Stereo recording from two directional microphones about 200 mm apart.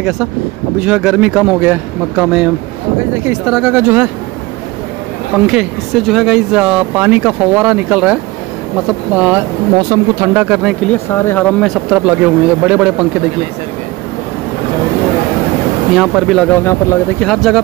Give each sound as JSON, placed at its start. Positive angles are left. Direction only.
{"t": 0.7, "sound": "speech", "side_deg": -5}
{"t": 5.3, "sound": "speech", "side_deg": -5}
{"t": 9.8, "sound": "speech", "side_deg": -20}
{"t": 10.3, "sound": "speech", "side_deg": -5}
{"t": 10.9, "sound": "speech", "side_deg": 10}
{"t": 16.0, "sound": "speech", "side_deg": 0}
{"t": 16.6, "sound": "speech", "side_deg": 10}
{"t": 17.3, "sound": "speech", "side_deg": 0}